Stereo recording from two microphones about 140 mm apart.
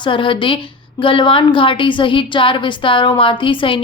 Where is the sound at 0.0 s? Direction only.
35° left (ahead or behind).